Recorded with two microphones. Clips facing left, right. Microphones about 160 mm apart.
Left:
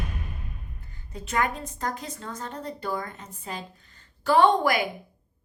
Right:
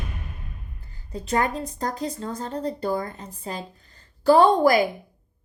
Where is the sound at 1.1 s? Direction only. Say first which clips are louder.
Right 3 dB; 35° right (ahead or behind).